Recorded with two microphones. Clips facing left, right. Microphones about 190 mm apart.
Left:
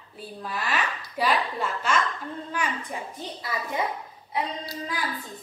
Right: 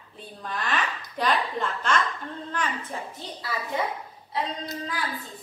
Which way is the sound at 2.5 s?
10° left (ahead or behind).